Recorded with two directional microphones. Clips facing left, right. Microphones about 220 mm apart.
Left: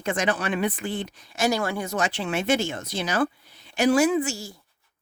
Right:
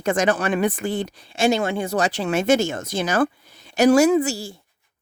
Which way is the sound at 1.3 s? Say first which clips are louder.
Right 4 dB; 25° right (ahead or behind).